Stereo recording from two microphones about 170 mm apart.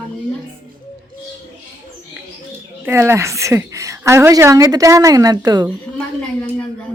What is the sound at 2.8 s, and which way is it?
A woman's voice, 15° right (ahead or behind).